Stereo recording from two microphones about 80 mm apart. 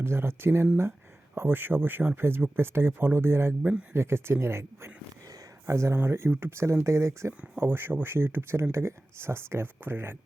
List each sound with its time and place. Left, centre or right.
0.0 s speech: right